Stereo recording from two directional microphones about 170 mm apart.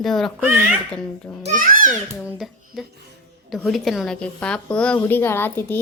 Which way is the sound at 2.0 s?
5° right (ahead or behind).